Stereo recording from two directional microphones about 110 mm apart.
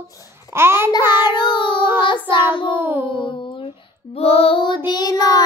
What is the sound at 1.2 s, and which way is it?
Child singing, 45° left (ahead or behind).